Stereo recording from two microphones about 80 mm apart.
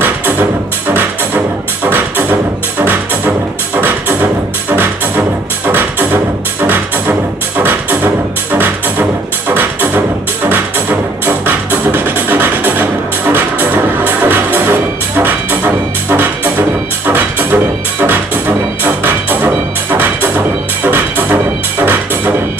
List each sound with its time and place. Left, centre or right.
1.9 s music: right
9.5 s music: right